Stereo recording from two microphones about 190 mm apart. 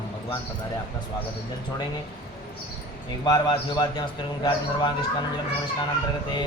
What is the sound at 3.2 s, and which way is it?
Speech, 25° left (ahead or behind).